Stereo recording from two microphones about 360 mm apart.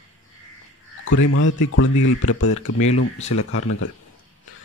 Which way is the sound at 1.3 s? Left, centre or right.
Left.